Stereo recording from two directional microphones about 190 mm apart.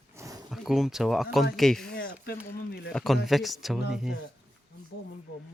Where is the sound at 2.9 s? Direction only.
Centre (ahead or behind).